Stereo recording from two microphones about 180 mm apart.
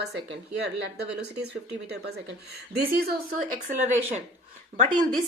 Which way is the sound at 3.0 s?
50° right (ahead or behind).